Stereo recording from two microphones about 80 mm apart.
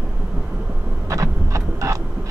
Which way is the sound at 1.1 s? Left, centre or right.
Right.